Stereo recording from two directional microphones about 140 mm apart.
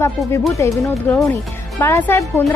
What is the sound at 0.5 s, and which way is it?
Speech, 20° left (ahead or behind).